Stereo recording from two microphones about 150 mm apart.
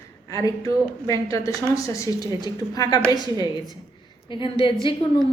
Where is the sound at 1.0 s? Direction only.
20° left (ahead or behind).